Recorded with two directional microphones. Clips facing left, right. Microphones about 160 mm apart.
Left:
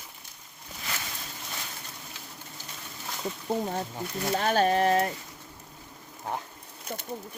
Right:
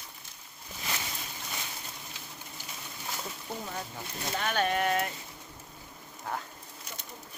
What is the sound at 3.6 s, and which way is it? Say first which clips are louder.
Speech: left 7 dB; 35° left (ahead or behind).